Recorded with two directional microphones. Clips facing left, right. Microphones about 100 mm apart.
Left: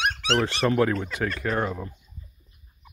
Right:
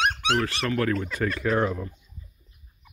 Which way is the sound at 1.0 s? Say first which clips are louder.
Right 1 dB; 15° left (ahead or behind).